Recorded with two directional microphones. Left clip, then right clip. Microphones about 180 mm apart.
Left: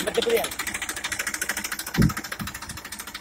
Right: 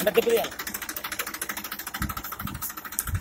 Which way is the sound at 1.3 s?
30° left (ahead or behind).